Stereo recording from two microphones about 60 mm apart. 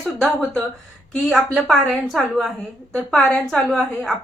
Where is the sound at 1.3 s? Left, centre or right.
Centre.